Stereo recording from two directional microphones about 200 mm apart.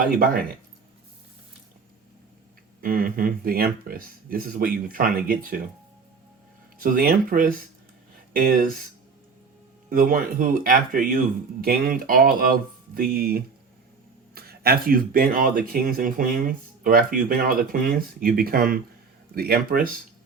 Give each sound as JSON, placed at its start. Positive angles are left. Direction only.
{"t": 0.0, "sound": "speech", "side_deg": -45}
{"t": 2.8, "sound": "speech", "side_deg": -45}
{"t": 6.8, "sound": "speech", "side_deg": -45}
{"t": 9.9, "sound": "speech", "side_deg": -45}